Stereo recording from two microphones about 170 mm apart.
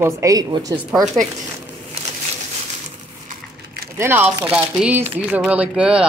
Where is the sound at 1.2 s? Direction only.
5° left (ahead or behind).